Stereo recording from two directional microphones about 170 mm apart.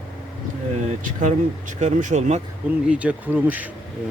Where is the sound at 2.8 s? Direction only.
5° right (ahead or behind).